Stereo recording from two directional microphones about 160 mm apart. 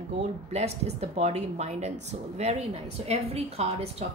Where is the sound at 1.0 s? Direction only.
40° right (ahead or behind).